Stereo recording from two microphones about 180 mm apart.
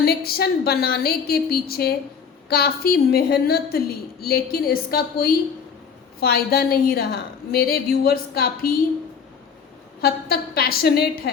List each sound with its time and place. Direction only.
0.0 s a woman's voice: 60° left (ahead or behind)
10.0 s a woman's voice: 60° left (ahead or behind)